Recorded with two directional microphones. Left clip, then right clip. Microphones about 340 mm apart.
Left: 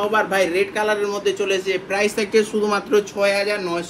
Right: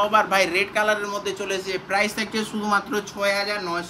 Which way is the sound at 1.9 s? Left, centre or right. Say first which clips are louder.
Even; right.